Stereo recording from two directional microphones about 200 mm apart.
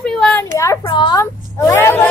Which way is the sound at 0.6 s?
20° left (ahead or behind).